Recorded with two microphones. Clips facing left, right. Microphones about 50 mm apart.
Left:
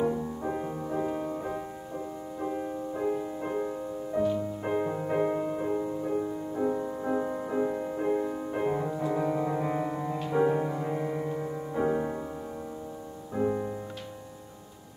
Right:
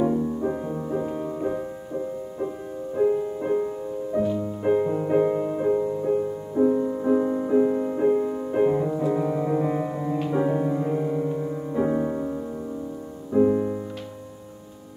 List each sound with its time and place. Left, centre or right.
0.0 s music: centre
3.0 s music: centre
11.0 s music: centre
11.7 s music: centre